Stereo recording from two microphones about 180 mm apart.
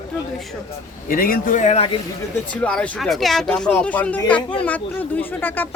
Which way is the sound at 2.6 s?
5° left (ahead or behind).